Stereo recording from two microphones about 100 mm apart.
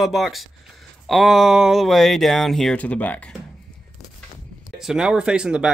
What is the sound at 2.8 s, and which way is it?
Speech, 15° left (ahead or behind).